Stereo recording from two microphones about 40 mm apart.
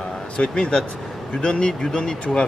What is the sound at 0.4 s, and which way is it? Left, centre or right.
Speech, left.